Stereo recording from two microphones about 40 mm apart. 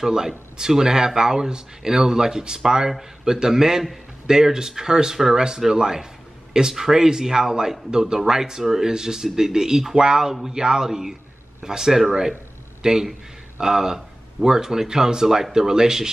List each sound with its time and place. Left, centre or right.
0.0 s speech: centre